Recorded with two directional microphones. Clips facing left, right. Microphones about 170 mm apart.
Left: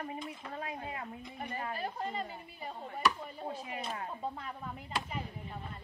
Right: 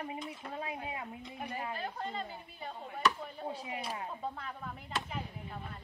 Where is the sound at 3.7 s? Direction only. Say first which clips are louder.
Even; 10° right (ahead or behind).